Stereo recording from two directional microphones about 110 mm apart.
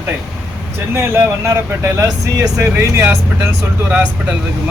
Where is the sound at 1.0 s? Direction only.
20° right (ahead or behind).